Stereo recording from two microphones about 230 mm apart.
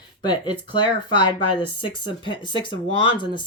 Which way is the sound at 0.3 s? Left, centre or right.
Left.